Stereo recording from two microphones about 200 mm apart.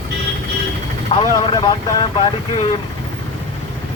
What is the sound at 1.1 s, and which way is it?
Speech, 25° left (ahead or behind).